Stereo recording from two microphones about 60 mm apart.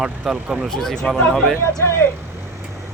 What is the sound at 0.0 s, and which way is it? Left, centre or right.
Speech, centre.